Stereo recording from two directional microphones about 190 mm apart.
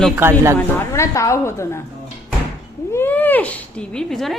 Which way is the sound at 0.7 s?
15° left (ahead or behind).